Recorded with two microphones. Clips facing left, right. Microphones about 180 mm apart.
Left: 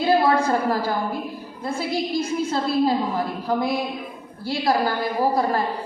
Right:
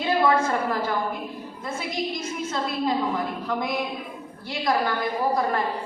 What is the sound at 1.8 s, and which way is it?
A woman's voice, 30° left (ahead or behind).